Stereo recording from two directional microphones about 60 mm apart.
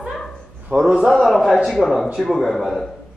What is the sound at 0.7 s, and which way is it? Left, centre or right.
A man's voice, centre.